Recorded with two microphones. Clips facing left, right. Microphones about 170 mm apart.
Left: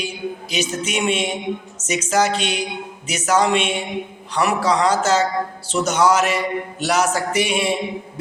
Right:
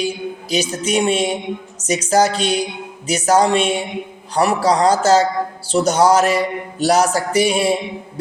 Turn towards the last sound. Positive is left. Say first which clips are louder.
# right 4 dB
turn(degrees=-35)  # may be behind; listen again after turning